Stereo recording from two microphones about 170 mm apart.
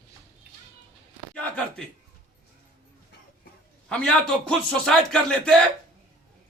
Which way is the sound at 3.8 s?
5° left (ahead or behind).